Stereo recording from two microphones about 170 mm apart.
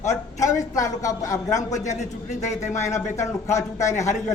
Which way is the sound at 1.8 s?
45° left (ahead or behind).